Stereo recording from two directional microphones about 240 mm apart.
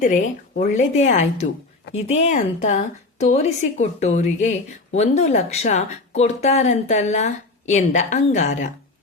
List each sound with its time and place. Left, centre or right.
0.0 s a woman's voice: left